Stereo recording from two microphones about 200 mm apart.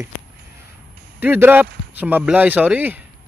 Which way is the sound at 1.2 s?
10° right (ahead or behind).